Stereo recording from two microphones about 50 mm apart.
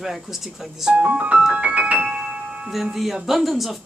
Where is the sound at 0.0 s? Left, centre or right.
Centre.